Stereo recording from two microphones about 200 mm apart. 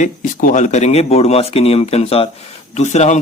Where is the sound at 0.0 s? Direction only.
40° left (ahead or behind).